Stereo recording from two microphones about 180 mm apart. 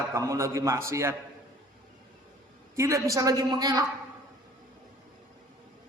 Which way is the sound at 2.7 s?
15° right (ahead or behind).